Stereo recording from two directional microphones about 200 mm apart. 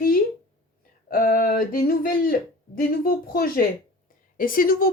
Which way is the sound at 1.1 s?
45° left (ahead or behind).